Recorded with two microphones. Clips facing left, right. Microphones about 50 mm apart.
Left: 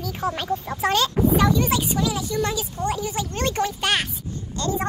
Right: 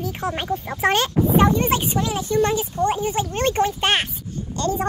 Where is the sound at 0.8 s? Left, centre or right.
Right.